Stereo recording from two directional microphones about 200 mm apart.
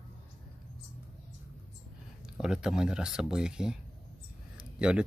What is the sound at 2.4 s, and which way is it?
Speech, 5° right (ahead or behind).